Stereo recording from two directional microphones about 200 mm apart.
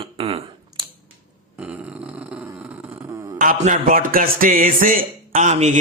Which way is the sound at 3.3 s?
40° right (ahead or behind).